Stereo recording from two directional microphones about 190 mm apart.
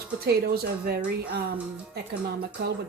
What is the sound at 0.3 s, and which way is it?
Speech, 55° right (ahead or behind).